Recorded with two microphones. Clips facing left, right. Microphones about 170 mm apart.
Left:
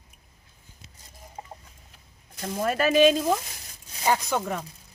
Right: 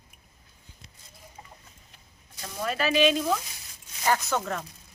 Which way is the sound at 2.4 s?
50° left (ahead or behind).